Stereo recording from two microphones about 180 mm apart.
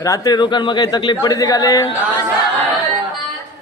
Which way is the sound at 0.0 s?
20° left (ahead or behind).